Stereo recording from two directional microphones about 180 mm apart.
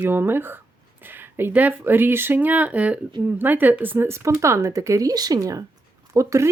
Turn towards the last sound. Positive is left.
turn(degrees=-15)  # may be behind; listen again after turning